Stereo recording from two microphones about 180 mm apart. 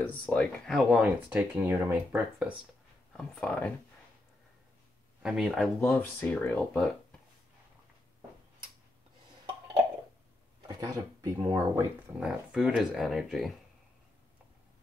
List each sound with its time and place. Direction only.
0.0 s speech: 10° left (ahead or behind); by 2.5 s 10° right (ahead or behind)
3.1 s speech: 5° left (ahead or behind)
5.2 s speech: centre (ahead or behind)
10.8 s speech: 20° right (ahead or behind)
12.2 s speech: 5° right (ahead or behind)